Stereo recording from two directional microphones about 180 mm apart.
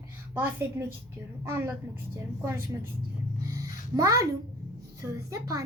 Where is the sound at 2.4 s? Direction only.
15° right (ahead or behind).